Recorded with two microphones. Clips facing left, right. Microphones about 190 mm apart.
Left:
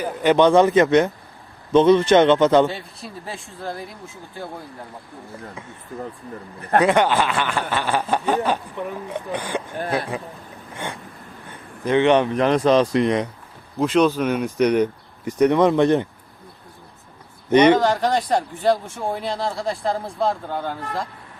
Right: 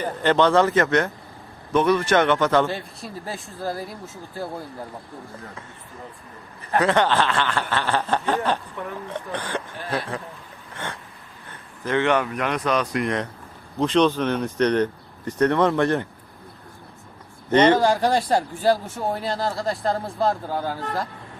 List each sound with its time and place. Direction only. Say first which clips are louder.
0.0 s snicker: left 3 dB; 10° left (ahead or behind)
1.7 s speech: left 5 dB; 20° left (ahead or behind)
2.6 s speech: left 1 dB; centre (ahead or behind)
6.7 s snicker: left 3 dB; 15° left (ahead or behind)
11.9 s speech: left 5 dB; 20° left (ahead or behind)
13.7 s snicker: left 1 dB; 5° left (ahead or behind)
17.5 s snicker: left 3 dB; 15° left (ahead or behind)
17.7 s speech: even; 10° right (ahead or behind)